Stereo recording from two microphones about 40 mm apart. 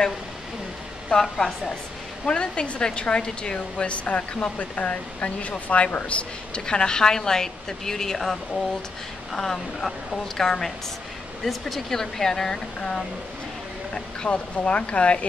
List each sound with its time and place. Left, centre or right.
1.1 s a woman's voice: centre
2.2 s speech: left
6.6 s a woman's voice: centre
13.9 s speech: left